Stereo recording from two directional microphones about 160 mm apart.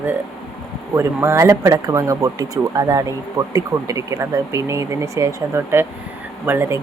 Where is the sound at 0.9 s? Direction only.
15° right (ahead or behind).